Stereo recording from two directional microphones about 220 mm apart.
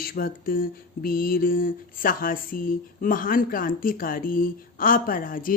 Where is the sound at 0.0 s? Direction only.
40° left (ahead or behind).